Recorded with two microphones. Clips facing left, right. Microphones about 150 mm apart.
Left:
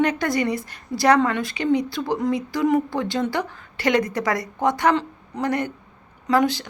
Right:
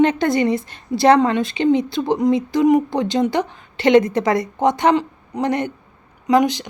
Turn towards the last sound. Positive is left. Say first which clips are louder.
# right 4 dB
turn(degrees=-20)  # may be behind; listen again after turning